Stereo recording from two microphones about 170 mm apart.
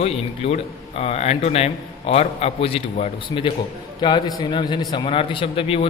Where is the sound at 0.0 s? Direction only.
35° left (ahead or behind).